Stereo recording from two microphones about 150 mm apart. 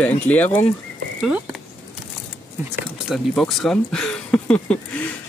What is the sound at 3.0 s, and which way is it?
Speech, centre (ahead or behind).